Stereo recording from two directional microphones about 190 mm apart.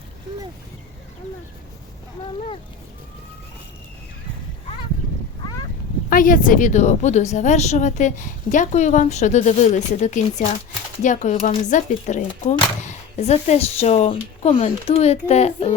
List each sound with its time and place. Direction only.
6.1 s speech: 45° left (ahead or behind)